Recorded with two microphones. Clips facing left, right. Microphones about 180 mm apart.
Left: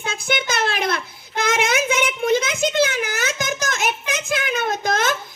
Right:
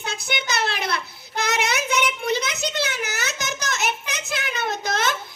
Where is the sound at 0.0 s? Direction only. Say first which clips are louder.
Left 5 dB; 50° left (ahead or behind).